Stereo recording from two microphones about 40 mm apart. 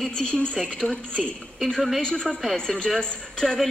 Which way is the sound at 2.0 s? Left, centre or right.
Centre.